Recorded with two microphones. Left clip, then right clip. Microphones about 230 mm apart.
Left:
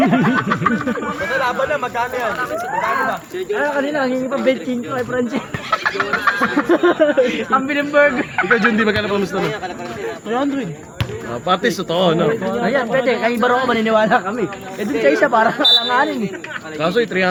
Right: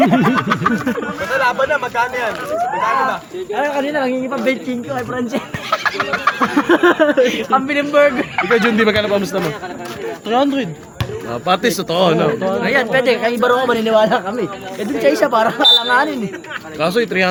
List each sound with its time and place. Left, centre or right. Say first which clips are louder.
0.0 s a sound: right 2 dB; right
0.7 s speech: right 1 dB; right
3.6 s speech: right 2 dB; right
12.6 s speech: right 2 dB; right
16.8 s speech: right 1 dB; right